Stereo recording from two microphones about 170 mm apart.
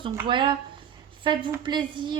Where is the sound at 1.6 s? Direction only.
25° right (ahead or behind).